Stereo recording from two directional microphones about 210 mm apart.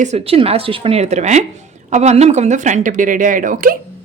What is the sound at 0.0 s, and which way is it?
Speech, 30° right (ahead or behind).